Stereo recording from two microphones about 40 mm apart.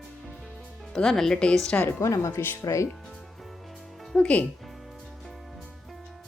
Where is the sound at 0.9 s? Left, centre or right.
Centre.